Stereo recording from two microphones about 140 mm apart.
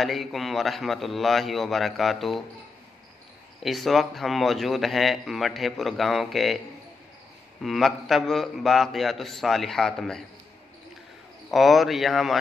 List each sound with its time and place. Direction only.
0.0 s speech: centre (ahead or behind)
3.6 s speech: centre (ahead or behind)
7.6 s speech: centre (ahead or behind)
11.5 s speech: centre (ahead or behind)